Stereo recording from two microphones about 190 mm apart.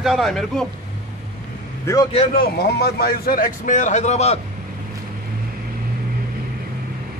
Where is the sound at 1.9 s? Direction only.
15° left (ahead or behind).